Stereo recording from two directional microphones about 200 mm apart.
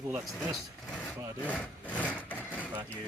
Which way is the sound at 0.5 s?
Centre (ahead or behind).